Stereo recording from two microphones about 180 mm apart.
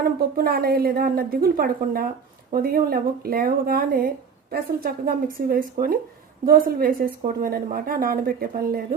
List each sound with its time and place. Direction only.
0.0 s a woman's voice: 60° right (ahead or behind)